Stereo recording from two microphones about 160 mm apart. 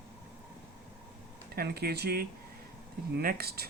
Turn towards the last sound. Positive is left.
turn(degrees=-75)  # may be behind; listen again after turning